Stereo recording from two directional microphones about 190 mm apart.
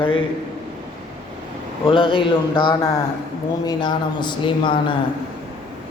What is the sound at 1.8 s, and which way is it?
A man's voice, 25° left (ahead or behind).